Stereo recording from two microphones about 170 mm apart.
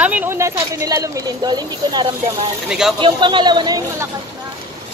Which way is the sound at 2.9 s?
30° right (ahead or behind).